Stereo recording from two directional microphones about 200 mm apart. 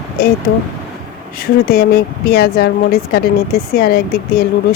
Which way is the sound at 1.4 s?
50° left (ahead or behind).